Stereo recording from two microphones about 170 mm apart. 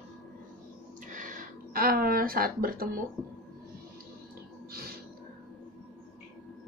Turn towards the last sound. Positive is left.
turn(degrees=-60)  # may be behind; listen again after turning